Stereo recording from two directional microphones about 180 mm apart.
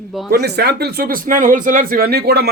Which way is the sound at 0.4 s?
65° right (ahead or behind).